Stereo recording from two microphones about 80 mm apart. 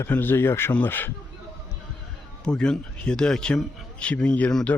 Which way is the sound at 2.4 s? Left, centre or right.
Centre.